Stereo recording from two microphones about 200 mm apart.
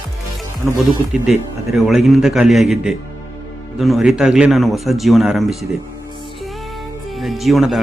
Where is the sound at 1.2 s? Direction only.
Centre (ahead or behind).